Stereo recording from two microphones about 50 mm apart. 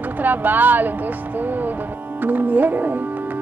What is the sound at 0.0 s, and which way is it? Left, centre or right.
A woman's voice, right.